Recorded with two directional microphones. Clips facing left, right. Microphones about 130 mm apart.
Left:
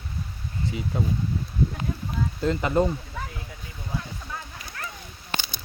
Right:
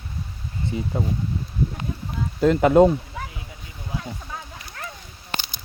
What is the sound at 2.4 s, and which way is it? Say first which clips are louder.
Speech: right 9 dB; 60° right (ahead or behind).